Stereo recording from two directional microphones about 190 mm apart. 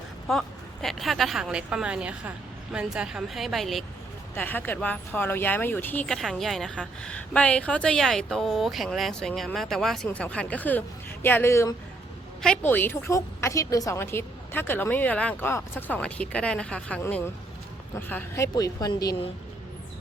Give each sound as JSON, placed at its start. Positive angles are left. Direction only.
{"t": 0.3, "sound": "a woman's voice", "side_deg": 0}